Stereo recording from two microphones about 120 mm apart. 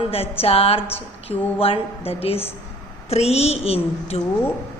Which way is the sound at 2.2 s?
55° left (ahead or behind).